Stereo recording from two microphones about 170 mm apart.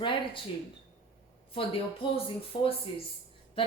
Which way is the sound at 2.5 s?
30° left (ahead or behind).